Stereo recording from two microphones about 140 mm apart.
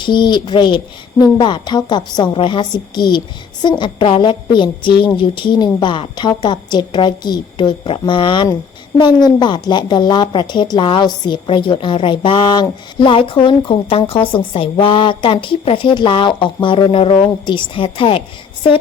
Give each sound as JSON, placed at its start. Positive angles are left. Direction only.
{"t": 0.0, "sound": "a woman's voice", "side_deg": 35}